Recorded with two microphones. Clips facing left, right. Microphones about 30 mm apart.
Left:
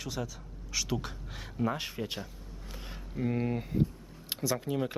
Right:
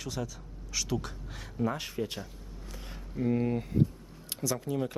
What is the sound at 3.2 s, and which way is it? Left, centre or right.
Speech, centre.